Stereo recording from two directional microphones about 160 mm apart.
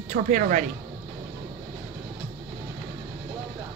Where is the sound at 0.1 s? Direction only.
55° right (ahead or behind).